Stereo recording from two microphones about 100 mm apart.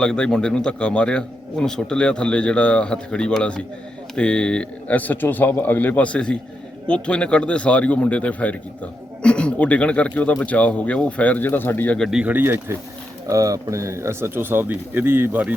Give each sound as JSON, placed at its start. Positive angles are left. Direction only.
{"t": 0.0, "sound": "a man's voice", "side_deg": 10}
{"t": 11.9, "sound": "speech", "side_deg": 0}
{"t": 12.2, "sound": "speech", "side_deg": -20}
{"t": 13.2, "sound": "speech", "side_deg": -35}